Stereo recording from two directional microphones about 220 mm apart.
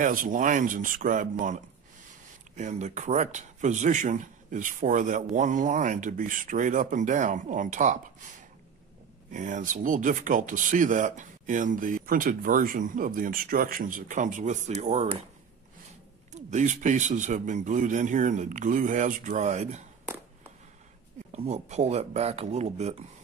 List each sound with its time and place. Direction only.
0.0 s speech: 35° right (ahead or behind)
16.3 s speech: 35° right (ahead or behind)
21.3 s speech: 30° right (ahead or behind)